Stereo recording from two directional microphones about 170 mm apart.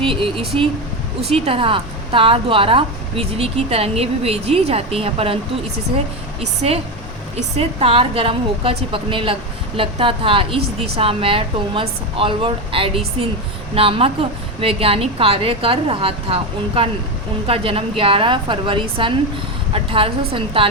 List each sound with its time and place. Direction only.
0.0 s a woman's voice: 30° right (ahead or behind)
6.4 s a woman's voice: 40° right (ahead or behind)